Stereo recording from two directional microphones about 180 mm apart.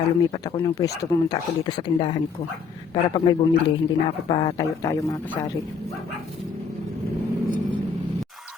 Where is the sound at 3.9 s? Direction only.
25° left (ahead or behind).